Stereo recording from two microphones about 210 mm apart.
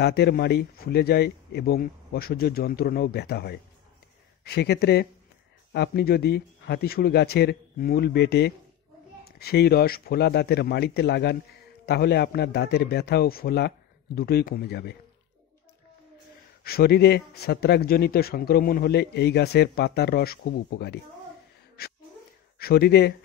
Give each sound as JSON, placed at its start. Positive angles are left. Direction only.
{"t": 0.0, "sound": "speech", "side_deg": 50}
{"t": 16.6, "sound": "speech", "side_deg": 50}
{"t": 22.6, "sound": "speech", "side_deg": 50}